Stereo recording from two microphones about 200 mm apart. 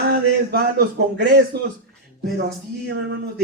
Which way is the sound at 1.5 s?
55° right (ahead or behind).